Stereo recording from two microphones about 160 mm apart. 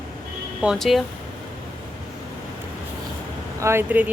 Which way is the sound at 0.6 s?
Centre (ahead or behind).